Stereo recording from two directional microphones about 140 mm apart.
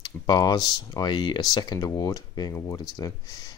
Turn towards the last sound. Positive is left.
turn(degrees=30)  # may be behind; listen again after turning